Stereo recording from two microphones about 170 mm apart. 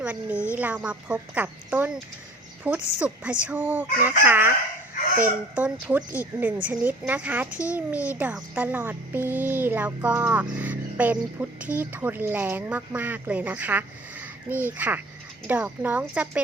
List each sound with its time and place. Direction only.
0.0 s speech: 10° right (ahead or behind)